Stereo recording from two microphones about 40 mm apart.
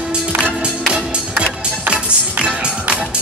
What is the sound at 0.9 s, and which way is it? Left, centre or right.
Music, right.